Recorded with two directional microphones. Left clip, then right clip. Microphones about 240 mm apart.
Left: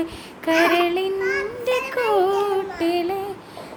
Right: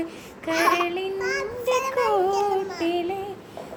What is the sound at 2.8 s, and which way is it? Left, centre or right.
Child singing, left.